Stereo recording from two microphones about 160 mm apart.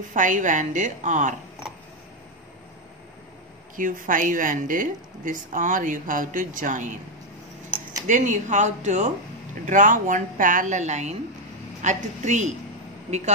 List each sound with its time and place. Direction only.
0.1 s a woman's voice: 55° right (ahead or behind)
3.7 s a woman's voice: 55° right (ahead or behind)
8.1 s a woman's voice: 50° right (ahead or behind)